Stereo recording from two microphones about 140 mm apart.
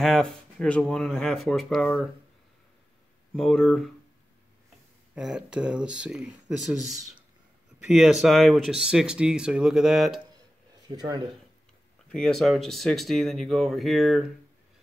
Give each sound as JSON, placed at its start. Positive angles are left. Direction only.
{"t": 0.0, "sound": "speech", "side_deg": 5}
{"t": 3.3, "sound": "speech", "side_deg": 0}
{"t": 5.1, "sound": "speech", "side_deg": -5}
{"t": 10.9, "sound": "speech", "side_deg": -30}
{"t": 12.1, "sound": "speech", "side_deg": 5}